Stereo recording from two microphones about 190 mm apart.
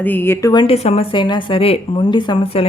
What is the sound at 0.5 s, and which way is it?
A woman's voice, 30° left (ahead or behind).